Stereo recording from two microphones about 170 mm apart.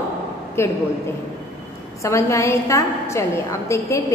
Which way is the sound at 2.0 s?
15° left (ahead or behind).